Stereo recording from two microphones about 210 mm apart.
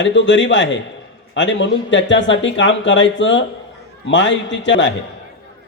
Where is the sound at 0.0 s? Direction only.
60° left (ahead or behind).